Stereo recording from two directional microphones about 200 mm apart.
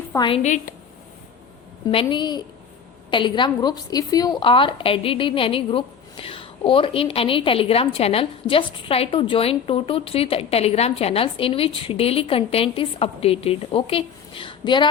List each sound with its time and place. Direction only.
0.2 s a woman's voice: 30° left (ahead or behind)
1.9 s a woman's voice: 25° left (ahead or behind)